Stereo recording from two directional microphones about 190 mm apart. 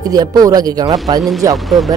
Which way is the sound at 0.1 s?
20° right (ahead or behind).